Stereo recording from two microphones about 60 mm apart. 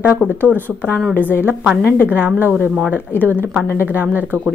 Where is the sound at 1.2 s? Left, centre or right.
Left.